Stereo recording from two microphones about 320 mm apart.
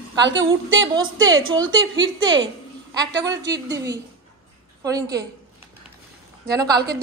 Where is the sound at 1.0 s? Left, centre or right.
Right.